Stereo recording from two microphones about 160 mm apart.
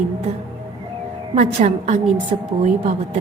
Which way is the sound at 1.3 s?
45° right (ahead or behind).